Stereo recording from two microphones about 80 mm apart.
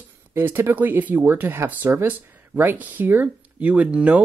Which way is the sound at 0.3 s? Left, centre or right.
Right.